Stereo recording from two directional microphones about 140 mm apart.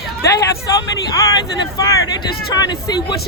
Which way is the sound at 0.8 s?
25° left (ahead or behind).